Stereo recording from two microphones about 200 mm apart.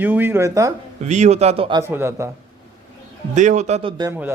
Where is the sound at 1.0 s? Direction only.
35° right (ahead or behind).